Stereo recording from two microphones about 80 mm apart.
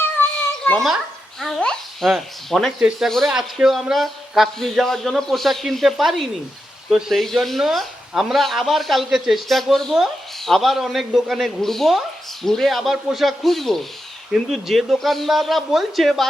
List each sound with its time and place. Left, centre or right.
0.7 s a child's voice: left
1.4 s speech: centre